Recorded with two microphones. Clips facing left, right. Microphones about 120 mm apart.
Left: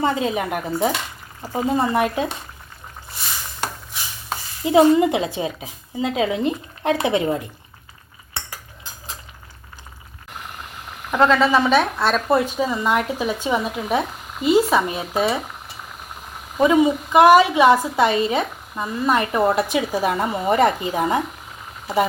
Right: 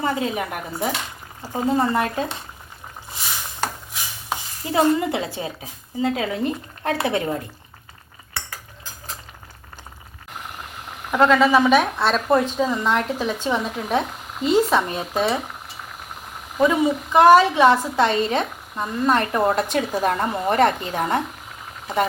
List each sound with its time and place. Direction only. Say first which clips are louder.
0.0 s a woman's voice: left 3 dB; 25° left (ahead or behind)
4.6 s a woman's voice: left 5 dB; 15° left (ahead or behind)
11.3 s a woman's voice: right 2 dB; 10° right (ahead or behind)
11.9 s a woman's voice: even; centre (ahead or behind)
16.6 s a woman's voice: left 3 dB; 15° left (ahead or behind)